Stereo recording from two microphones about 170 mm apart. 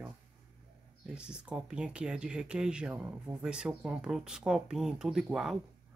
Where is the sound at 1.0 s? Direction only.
5° right (ahead or behind).